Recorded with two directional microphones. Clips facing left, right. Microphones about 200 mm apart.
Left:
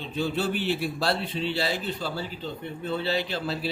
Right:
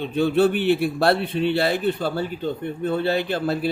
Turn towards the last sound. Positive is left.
turn(degrees=-55)  # may be behind; listen again after turning